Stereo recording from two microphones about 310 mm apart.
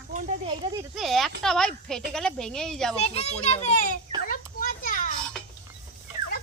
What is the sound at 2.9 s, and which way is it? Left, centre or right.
A child's voice, centre.